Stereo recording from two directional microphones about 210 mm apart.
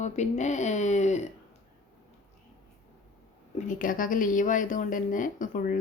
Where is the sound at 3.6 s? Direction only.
40° left (ahead or behind).